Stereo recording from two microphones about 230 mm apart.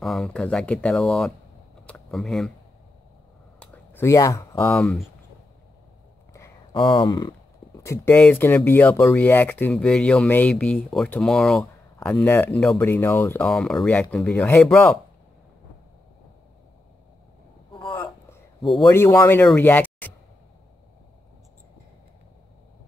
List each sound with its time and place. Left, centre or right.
0.0 s speech: centre
3.5 s speech: centre
6.3 s speech: centre
17.7 s a sound: centre
18.8 s speech: centre